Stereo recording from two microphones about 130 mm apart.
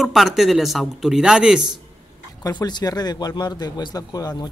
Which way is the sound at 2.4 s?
35° left (ahead or behind).